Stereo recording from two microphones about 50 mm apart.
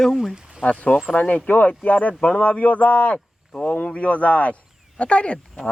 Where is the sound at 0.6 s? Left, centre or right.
Left.